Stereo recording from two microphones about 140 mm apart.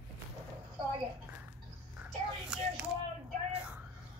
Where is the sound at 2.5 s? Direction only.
5° right (ahead or behind).